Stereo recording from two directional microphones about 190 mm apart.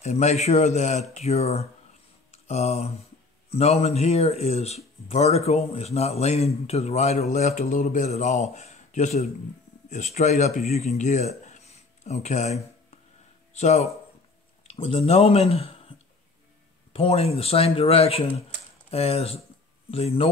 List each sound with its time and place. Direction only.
0.0 s speech: 35° left (ahead or behind)
2.4 s a sound: 35° left (ahead or behind)
3.4 s speech: 35° left (ahead or behind)